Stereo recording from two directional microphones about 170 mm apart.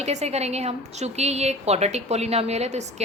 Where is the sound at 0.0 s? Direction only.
40° right (ahead or behind).